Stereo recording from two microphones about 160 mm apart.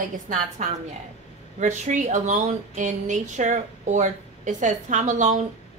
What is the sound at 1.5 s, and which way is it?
Speech, 50° right (ahead or behind).